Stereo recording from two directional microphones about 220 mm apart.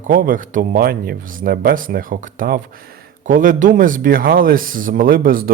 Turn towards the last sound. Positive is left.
turn(degrees=-40)  # may be behind; listen again after turning